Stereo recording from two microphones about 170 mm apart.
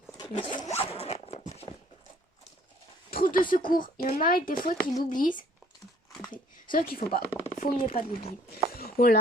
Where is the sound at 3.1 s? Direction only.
60° left (ahead or behind).